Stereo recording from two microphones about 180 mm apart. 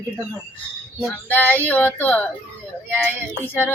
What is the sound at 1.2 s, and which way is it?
Speech, 10° left (ahead or behind).